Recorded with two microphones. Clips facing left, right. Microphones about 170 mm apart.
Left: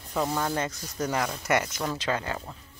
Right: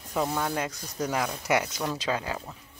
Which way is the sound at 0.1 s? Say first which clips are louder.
Even; centre (ahead or behind).